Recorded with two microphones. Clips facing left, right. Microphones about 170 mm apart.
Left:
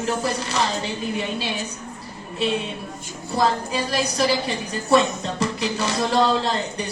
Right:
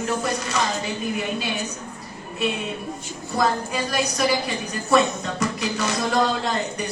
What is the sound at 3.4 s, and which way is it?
Speech, 30° left (ahead or behind).